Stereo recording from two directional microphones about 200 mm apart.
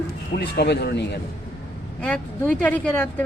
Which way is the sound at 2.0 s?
5° left (ahead or behind).